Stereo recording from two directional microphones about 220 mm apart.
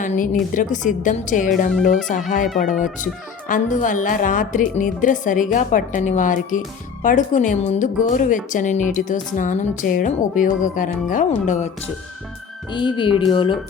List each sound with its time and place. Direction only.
0.0 s a woman's voice: 35° left (ahead or behind)
12.7 s speech: 20° left (ahead or behind)